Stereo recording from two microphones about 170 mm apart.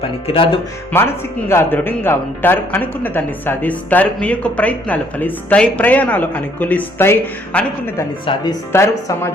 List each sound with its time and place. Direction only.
0.3 s speech: 30° left (ahead or behind)
0.9 s a man's voice: 15° left (ahead or behind)
8.3 s speech: 30° left (ahead or behind)
8.7 s a man's voice: 15° left (ahead or behind)